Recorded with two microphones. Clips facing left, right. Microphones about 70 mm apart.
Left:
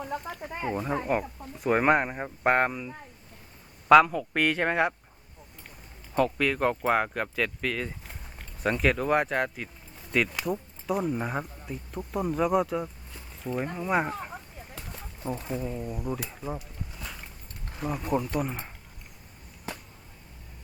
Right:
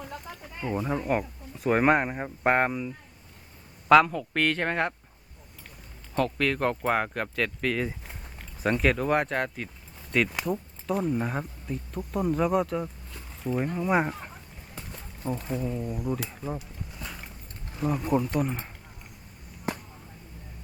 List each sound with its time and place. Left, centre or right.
0.4 s speech: left
0.7 s speech: centre
6.1 s speech: centre